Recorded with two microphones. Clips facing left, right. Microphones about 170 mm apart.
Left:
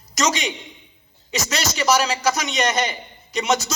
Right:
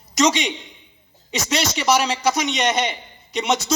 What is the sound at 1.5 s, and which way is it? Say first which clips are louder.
A man's voice: right 1 dB; 30° right (ahead or behind).